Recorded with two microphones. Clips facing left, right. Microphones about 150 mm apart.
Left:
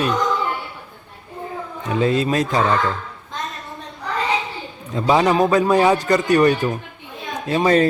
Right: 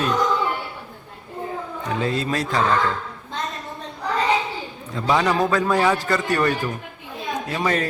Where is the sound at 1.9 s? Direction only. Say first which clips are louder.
Left 5 dB; 20° left (ahead or behind).